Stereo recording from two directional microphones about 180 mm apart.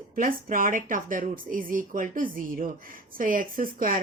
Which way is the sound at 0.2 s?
50° right (ahead or behind).